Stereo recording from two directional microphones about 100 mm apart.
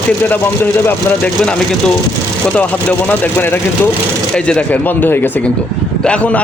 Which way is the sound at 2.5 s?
15° left (ahead or behind).